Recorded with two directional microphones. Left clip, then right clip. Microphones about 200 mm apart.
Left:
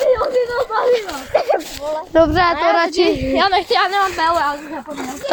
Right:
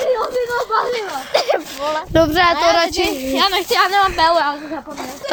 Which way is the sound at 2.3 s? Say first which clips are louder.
Right 1 dB; 10° left (ahead or behind).